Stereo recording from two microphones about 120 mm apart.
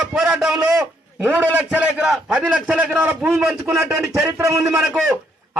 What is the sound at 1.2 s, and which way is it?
A man's voice, 15° right (ahead or behind).